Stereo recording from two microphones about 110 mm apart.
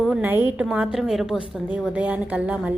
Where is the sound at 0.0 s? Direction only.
15° right (ahead or behind).